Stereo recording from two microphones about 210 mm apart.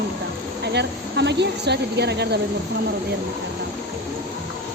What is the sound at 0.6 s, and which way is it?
Speech, 55° right (ahead or behind).